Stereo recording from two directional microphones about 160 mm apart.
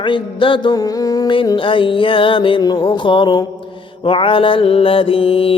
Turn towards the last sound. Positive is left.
turn(degrees=35)  # may be behind; listen again after turning